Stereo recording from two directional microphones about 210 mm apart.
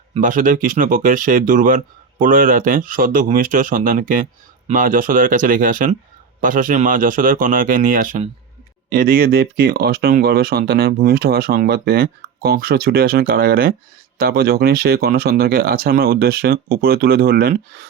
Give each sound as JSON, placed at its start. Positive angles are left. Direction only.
{"t": 0.1, "sound": "speech", "side_deg": -40}